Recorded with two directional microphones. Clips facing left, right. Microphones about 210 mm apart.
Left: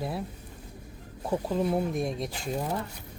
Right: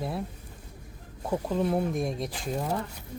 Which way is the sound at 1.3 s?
5° left (ahead or behind).